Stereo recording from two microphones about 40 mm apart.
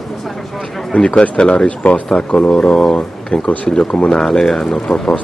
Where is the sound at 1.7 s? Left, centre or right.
Left.